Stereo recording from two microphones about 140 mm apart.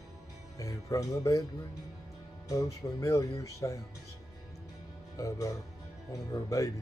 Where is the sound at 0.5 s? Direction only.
25° left (ahead or behind).